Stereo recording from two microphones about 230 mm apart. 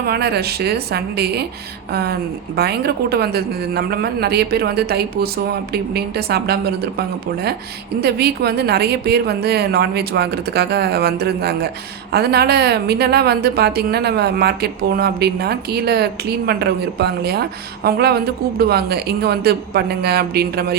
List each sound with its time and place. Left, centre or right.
0.0 s a woman's voice: right
8.0 s a woman's voice: right